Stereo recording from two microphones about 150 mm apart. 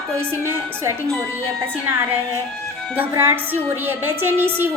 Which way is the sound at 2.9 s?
15° right (ahead or behind).